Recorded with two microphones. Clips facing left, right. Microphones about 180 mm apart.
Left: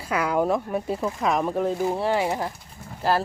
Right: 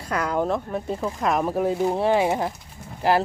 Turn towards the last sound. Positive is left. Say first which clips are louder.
# right 3 dB
turn(degrees=-15)  # may be behind; listen again after turning